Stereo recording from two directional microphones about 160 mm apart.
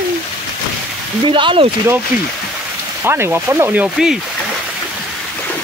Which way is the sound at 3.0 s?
15° right (ahead or behind).